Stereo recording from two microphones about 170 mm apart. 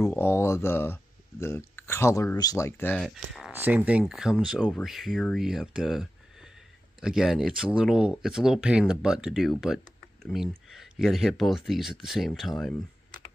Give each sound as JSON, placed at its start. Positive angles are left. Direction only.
{"t": 0.0, "sound": "speech", "side_deg": 15}
{"t": 3.0, "sound": "speech", "side_deg": 0}
{"t": 3.5, "sound": "speech", "side_deg": -10}